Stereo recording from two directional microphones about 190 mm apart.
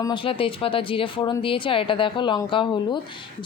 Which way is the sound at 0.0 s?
25° left (ahead or behind).